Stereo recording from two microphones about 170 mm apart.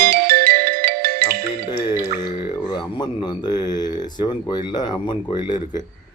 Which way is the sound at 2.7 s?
30° left (ahead or behind).